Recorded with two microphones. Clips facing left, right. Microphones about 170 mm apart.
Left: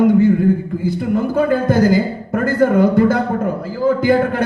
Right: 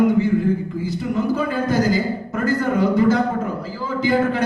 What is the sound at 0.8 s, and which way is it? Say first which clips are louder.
A man's voice: left 5 dB; 55° left (ahead or behind).